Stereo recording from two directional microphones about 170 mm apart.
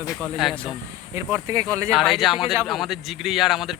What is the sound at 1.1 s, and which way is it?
Speech, 15° right (ahead or behind).